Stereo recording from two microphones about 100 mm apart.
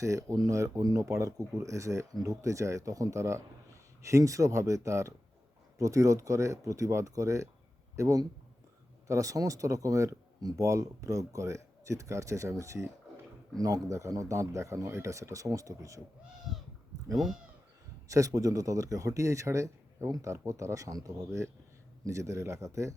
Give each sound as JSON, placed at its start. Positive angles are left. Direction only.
{"t": 0.0, "sound": "speech", "side_deg": -30}
{"t": 17.2, "sound": "speech", "side_deg": -5}
{"t": 18.1, "sound": "speech", "side_deg": -35}